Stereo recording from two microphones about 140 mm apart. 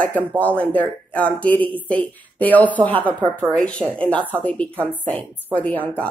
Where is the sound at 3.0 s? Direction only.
35° right (ahead or behind).